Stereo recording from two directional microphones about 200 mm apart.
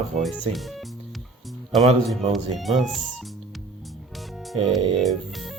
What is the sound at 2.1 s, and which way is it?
Speech, centre (ahead or behind).